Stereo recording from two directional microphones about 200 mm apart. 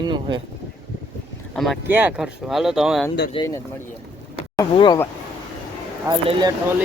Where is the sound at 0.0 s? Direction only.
20° right (ahead or behind).